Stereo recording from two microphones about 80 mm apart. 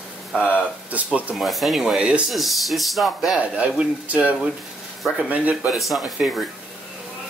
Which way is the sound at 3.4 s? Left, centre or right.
Centre.